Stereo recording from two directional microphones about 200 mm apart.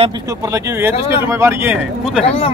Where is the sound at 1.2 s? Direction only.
15° right (ahead or behind).